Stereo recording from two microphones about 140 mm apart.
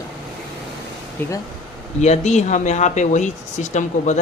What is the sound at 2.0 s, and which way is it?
Speech, 55° left (ahead or behind).